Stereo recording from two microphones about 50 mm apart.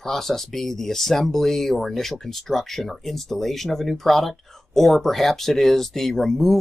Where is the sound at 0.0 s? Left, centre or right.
Centre.